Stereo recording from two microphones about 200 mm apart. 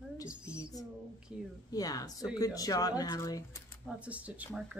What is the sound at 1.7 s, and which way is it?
A woman's voice, 20° left (ahead or behind).